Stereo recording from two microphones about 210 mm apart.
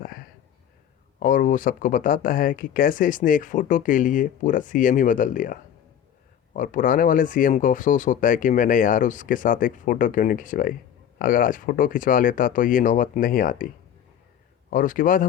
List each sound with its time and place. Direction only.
0.0 s a sound: 45° left (ahead or behind)
1.2 s speech: 40° left (ahead or behind)
14.7 s speech: 40° left (ahead or behind)